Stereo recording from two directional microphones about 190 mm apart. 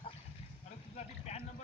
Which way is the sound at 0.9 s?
35° left (ahead or behind).